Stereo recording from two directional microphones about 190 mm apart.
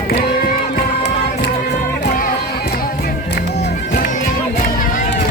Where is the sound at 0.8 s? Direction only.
55° left (ahead or behind).